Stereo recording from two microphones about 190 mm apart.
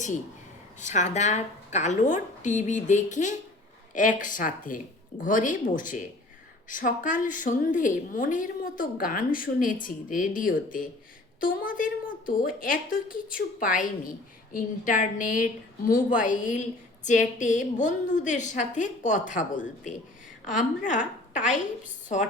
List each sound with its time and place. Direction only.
0.8 s a woman's voice: 40° left (ahead or behind)